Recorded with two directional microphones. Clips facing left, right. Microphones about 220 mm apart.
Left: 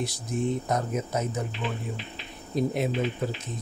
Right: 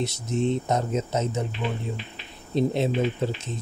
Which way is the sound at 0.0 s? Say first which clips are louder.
Right 3 dB; 25° right (ahead or behind).